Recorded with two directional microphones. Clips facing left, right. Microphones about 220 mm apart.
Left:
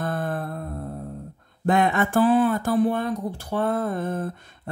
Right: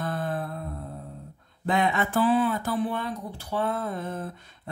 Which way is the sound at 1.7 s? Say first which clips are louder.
Left 4 dB; 50° left (ahead or behind).